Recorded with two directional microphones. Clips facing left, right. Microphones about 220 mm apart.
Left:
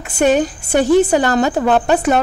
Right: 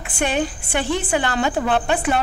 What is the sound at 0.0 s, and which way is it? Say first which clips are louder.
A woman's voice: left 8 dB; 40° left (ahead or behind).